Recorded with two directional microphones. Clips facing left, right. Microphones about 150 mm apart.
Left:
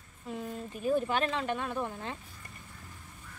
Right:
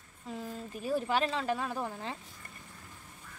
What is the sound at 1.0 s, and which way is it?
Speech, 30° right (ahead or behind).